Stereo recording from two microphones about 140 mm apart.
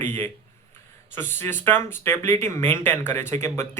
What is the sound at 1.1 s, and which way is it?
Speech, 15° left (ahead or behind).